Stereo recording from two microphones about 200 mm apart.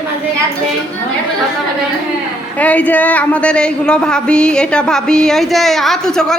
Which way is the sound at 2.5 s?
5° left (ahead or behind).